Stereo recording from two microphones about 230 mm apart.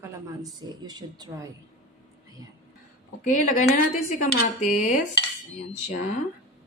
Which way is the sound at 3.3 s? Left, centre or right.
Left.